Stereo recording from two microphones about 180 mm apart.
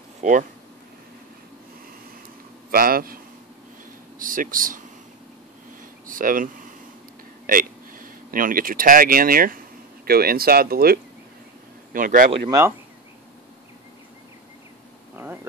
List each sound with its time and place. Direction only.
0.2 s speech: 45° right (ahead or behind)
2.7 s speech: 55° right (ahead or behind)
4.2 s speech: 50° right (ahead or behind)
6.0 s speech: 50° right (ahead or behind)
12.4 s speech: 15° right (ahead or behind)